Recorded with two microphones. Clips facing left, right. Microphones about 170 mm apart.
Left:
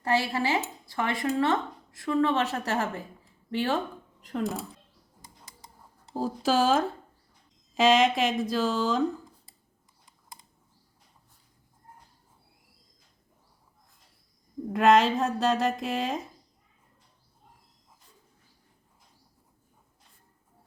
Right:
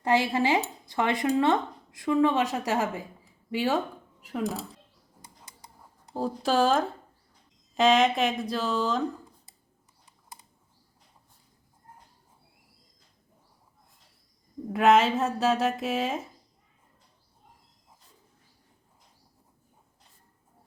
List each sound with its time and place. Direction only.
0.0 s speech: 20° right (ahead or behind)
6.1 s a woman's voice: centre (ahead or behind)
14.7 s a woman's voice: centre (ahead or behind)